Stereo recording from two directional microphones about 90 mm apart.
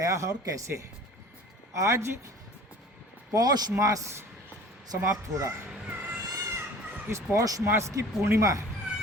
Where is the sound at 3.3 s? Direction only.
45° right (ahead or behind).